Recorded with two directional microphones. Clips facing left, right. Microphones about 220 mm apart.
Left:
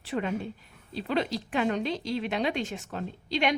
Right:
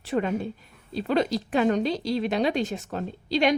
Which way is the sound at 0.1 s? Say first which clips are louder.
Right 4 dB; 45° right (ahead or behind).